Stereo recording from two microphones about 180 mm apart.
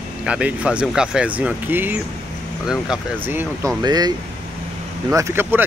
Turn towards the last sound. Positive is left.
turn(degrees=-10)  # may be behind; listen again after turning